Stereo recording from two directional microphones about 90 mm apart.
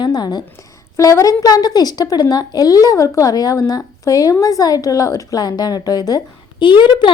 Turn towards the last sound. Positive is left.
turn(degrees=60)  # may be behind; listen again after turning